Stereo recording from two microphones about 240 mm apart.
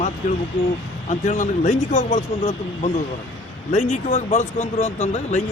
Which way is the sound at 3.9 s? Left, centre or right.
Left.